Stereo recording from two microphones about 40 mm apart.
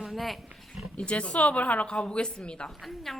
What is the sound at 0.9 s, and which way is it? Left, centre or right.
A woman's voice, left.